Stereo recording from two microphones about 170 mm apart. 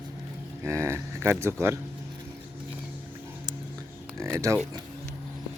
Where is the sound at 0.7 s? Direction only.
15° right (ahead or behind).